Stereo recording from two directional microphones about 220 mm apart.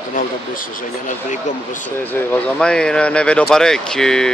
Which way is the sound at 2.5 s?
5° left (ahead or behind).